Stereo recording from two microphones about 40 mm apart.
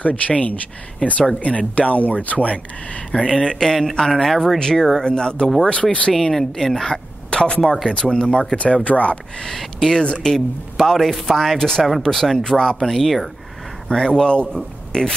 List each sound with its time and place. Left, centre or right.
0.0 s speech: left
3.4 s speech: centre; by 6.1 s left
6.3 s speech: centre
6.9 s a sound: left
7.6 s a man's voice: centre
8.5 s speech: left
9.4 s speech: centre
9.9 s speech: left
10.3 s a man's voice: centre
11.5 s speech: centre
12.8 s a man's voice: centre
13.8 s speech: centre